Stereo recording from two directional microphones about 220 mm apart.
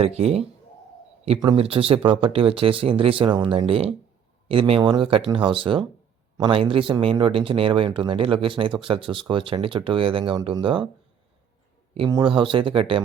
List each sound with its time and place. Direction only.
0.0 s speech: 25° right (ahead or behind)
11.9 s speech: 20° right (ahead or behind)